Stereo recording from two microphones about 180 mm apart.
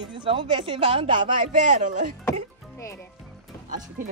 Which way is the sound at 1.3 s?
50° right (ahead or behind).